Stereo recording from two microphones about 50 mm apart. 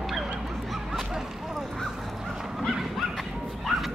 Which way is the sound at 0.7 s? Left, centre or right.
Centre.